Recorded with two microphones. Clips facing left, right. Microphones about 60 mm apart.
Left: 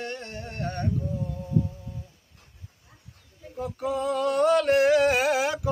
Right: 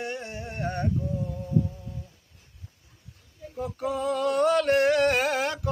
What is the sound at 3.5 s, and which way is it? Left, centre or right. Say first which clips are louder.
Music: left 1 dB; centre.